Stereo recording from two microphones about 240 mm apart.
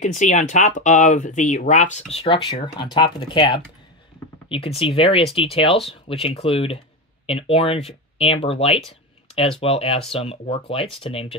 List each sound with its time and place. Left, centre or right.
0.0 s speech: left